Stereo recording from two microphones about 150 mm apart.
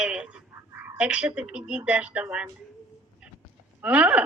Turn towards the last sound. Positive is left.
turn(degrees=-10)  # may be behind; listen again after turning